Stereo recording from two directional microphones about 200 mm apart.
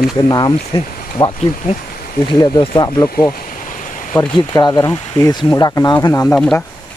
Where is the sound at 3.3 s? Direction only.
40° left (ahead or behind).